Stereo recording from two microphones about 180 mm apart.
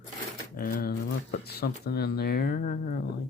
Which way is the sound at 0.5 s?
50° left (ahead or behind).